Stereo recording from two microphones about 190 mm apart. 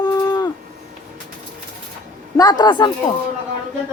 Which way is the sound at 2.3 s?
20° left (ahead or behind).